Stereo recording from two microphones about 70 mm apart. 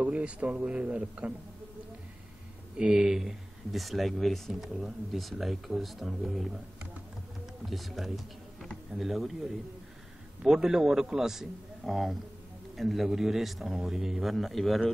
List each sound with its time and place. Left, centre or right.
0.0 s speech: centre
2.8 s speech: centre
7.6 s speech: centre